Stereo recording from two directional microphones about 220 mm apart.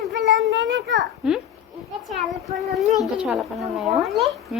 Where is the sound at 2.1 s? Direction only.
Centre (ahead or behind).